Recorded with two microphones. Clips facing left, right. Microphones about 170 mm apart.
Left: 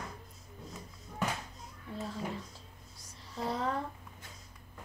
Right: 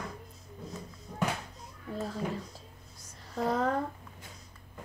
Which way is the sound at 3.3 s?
45° right (ahead or behind).